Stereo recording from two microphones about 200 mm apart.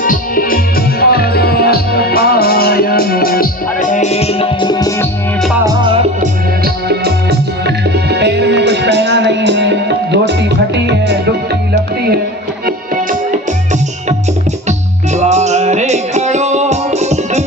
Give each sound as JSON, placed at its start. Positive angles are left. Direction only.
{"t": 0.0, "sound": "music", "side_deg": 45}
{"t": 5.6, "sound": "music", "side_deg": -25}
{"t": 6.8, "sound": "music", "side_deg": -55}
{"t": 14.7, "sound": "music", "side_deg": -35}